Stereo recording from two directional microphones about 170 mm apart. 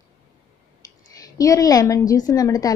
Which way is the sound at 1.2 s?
20° left (ahead or behind).